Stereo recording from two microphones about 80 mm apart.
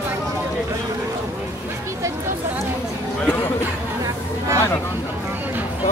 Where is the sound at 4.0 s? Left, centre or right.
Right.